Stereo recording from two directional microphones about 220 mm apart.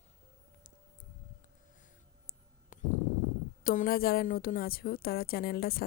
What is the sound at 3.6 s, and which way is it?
A woman's voice, 40° left (ahead or behind).